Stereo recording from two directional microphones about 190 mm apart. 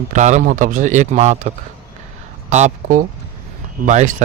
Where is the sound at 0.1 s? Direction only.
40° right (ahead or behind).